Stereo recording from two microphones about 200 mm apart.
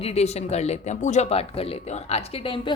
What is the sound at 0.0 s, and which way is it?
A woman's voice, 30° left (ahead or behind).